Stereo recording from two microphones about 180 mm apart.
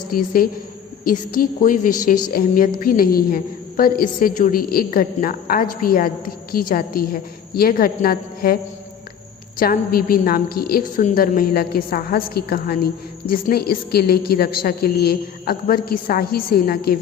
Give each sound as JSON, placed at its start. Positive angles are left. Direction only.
{"t": 0.1, "sound": "a woman's voice", "side_deg": 55}
{"t": 9.6, "sound": "a woman's voice", "side_deg": 55}